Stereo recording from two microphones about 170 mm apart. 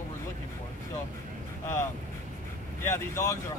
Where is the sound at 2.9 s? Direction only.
15° left (ahead or behind).